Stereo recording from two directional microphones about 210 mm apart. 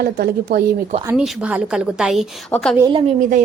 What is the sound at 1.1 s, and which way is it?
A woman's voice, 5° right (ahead or behind).